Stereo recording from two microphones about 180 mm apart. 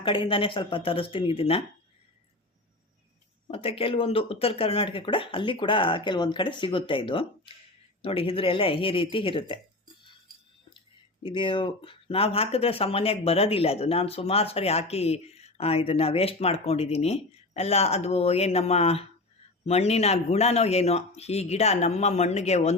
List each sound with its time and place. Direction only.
0.0 s speech: 30° left (ahead or behind)
3.4 s speech: 35° left (ahead or behind)
10.8 s speech: 25° left (ahead or behind)